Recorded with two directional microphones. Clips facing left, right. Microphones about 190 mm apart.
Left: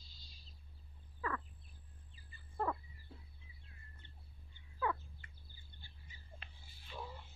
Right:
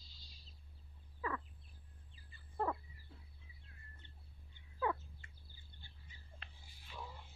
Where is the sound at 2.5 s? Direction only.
15° right (ahead or behind).